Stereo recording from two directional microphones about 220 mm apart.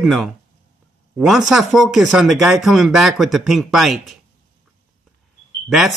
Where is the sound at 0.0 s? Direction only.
Centre (ahead or behind).